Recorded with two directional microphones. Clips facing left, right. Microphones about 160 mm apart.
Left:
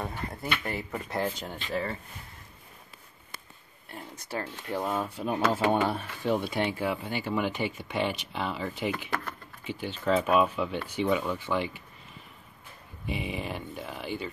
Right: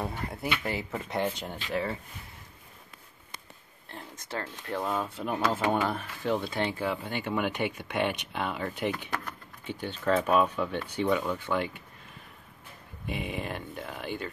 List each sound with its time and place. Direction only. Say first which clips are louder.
0.0 s speech: right 1 dB; 10° right (ahead or behind)
3.9 s speech: left 1 dB; 15° left (ahead or behind)
8.1 s speech: even; 55° right (ahead or behind)
8.4 s speech: even; centre (ahead or behind)
13.0 s speech: left 1 dB; 50° right (ahead or behind)
13.4 s speech: even; 5° left (ahead or behind)